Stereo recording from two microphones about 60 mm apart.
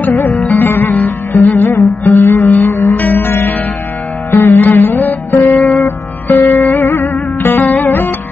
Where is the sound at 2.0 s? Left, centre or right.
Left.